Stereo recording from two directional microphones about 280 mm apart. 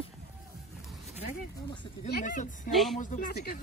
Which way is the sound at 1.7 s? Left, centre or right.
Centre.